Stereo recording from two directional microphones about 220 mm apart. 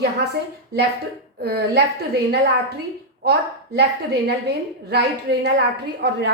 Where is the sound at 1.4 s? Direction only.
45° right (ahead or behind).